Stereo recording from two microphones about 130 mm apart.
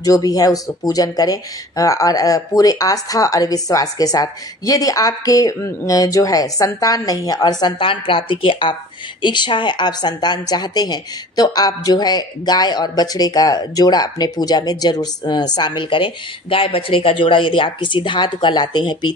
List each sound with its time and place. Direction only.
0.0 s a woman's voice: 25° left (ahead or behind)